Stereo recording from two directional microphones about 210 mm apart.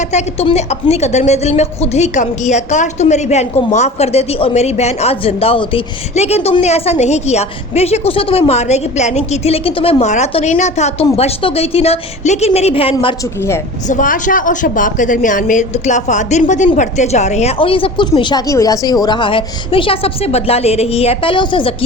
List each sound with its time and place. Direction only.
0.1 s a woman's voice: 30° left (ahead or behind)
13.8 s a woman's voice: 40° left (ahead or behind)